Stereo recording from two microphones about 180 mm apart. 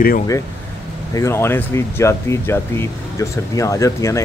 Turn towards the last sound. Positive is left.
turn(degrees=15)  # may be behind; listen again after turning